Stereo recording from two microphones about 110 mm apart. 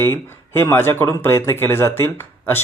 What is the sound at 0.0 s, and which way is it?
Speech, 20° left (ahead or behind).